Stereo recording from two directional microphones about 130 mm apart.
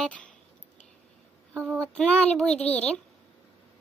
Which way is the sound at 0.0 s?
10° left (ahead or behind).